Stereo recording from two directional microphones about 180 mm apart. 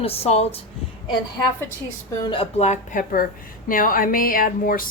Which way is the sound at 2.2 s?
30° left (ahead or behind).